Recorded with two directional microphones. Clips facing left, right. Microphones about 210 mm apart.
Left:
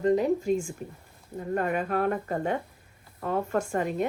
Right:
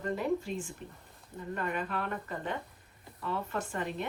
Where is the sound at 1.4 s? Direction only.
45° left (ahead or behind).